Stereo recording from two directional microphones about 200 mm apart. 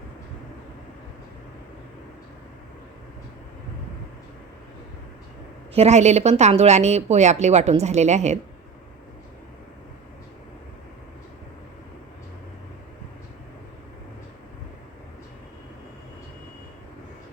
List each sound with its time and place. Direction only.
5.7 s speech: 35° right (ahead or behind)